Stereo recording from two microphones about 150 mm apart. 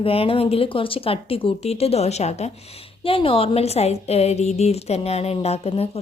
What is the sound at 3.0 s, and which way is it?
A woman's voice, 35° left (ahead or behind).